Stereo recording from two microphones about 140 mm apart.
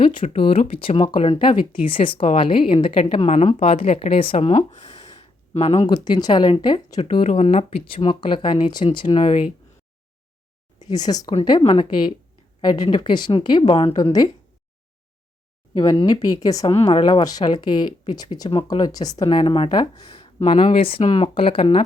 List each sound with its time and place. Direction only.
0.0 s speech: 40° left (ahead or behind)
3.2 s speech: 50° left (ahead or behind)
5.8 s speech: 30° left (ahead or behind)
7.3 s speech: 50° left (ahead or behind)
10.8 s speech: 30° left (ahead or behind)
13.9 s speech: 30° left (ahead or behind)
15.8 s speech: 30° left (ahead or behind)